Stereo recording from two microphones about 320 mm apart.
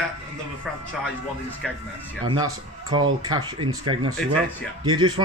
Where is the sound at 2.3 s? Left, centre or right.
Centre.